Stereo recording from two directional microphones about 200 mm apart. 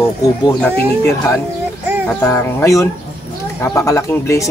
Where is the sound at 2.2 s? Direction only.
15° left (ahead or behind).